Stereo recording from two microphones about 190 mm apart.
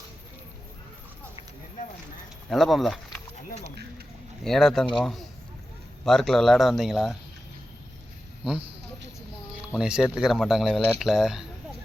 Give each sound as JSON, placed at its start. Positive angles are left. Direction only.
{"t": 2.5, "sound": "speech", "side_deg": 0}
{"t": 4.4, "sound": "speech", "side_deg": 0}
{"t": 9.7, "sound": "speech", "side_deg": -5}